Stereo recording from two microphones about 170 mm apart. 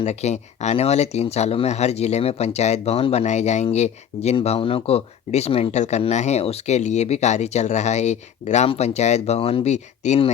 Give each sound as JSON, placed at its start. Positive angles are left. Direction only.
{"t": 0.0, "sound": "speech", "side_deg": 40}